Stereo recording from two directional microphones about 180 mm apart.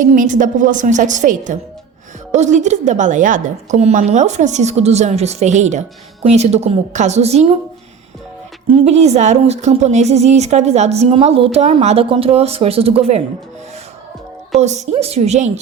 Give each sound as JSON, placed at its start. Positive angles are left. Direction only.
{"t": 0.0, "sound": "a woman's voice", "side_deg": -45}
{"t": 8.6, "sound": "speech", "side_deg": -35}
{"t": 14.5, "sound": "speech", "side_deg": -40}